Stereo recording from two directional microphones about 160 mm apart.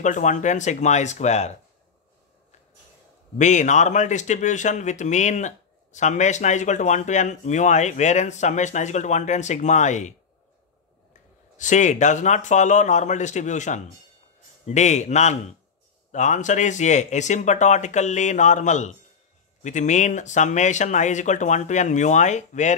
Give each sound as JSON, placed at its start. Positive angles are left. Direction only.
{"t": 0.0, "sound": "a man's voice", "side_deg": 50}
{"t": 3.3, "sound": "a man's voice", "side_deg": 50}
{"t": 11.5, "sound": "a man's voice", "side_deg": 50}